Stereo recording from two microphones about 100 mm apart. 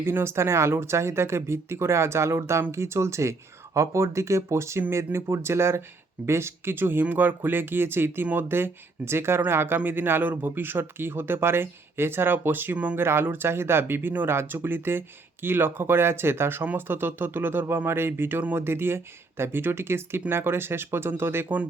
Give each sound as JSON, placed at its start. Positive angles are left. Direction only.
{"t": 0.0, "sound": "speech", "side_deg": -25}